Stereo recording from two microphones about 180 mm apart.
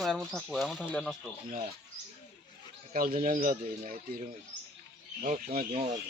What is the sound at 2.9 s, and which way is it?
Speech, 50° right (ahead or behind).